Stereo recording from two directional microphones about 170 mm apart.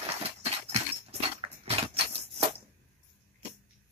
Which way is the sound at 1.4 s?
30° right (ahead or behind).